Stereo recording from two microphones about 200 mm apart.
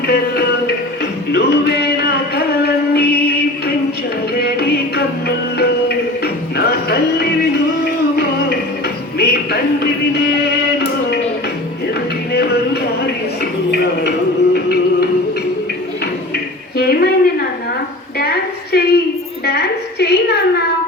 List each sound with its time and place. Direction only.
0.1 s music: 55° left (ahead or behind)
4.4 s music: 50° left (ahead or behind)
6.2 s music: 50° left (ahead or behind)
12.3 s music: 55° left (ahead or behind)
13.4 s a sound: 55° left (ahead or behind)
14.5 s music: 50° left (ahead or behind)
16.7 s a sound: 50° left (ahead or behind)